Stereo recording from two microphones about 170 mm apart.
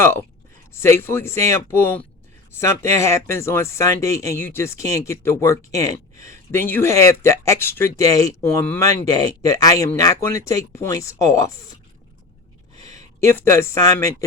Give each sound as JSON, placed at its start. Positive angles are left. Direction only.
{"t": 0.7, "sound": "speech", "side_deg": 15}
{"t": 13.1, "sound": "speech", "side_deg": 15}